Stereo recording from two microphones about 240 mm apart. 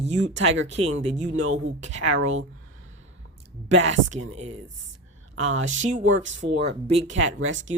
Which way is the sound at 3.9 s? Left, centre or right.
Right.